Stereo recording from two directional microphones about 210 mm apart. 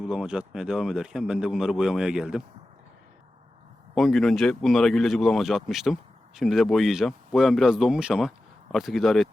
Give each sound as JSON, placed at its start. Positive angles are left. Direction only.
{"t": 0.0, "sound": "speech", "side_deg": -5}
{"t": 3.9, "sound": "speech", "side_deg": 0}